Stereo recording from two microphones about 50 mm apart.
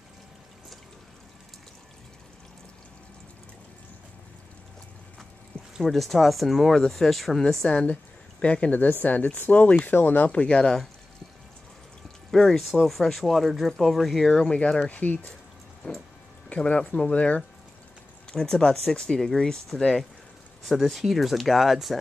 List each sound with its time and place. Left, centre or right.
5.5 s a sound: centre
5.9 s speech: centre
7.6 s a woman's voice: left
8.7 s speech: left
10.4 s speech: centre
12.3 s speech: centre
14.5 s speech: left
14.9 s speech: left
16.4 s speech: left
18.3 s speech: centre